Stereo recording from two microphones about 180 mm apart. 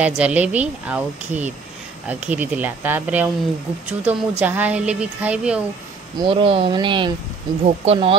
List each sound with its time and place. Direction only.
0.0 s speech: 5° right (ahead or behind)
6.1 s speech: 30° right (ahead or behind)